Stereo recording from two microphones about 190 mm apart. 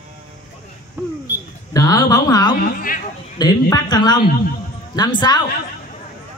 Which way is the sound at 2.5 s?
45° left (ahead or behind).